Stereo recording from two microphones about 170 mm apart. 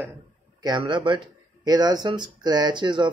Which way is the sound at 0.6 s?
25° right (ahead or behind).